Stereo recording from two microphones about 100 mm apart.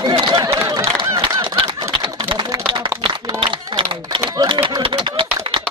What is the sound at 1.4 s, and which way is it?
Typewriter, 60° right (ahead or behind).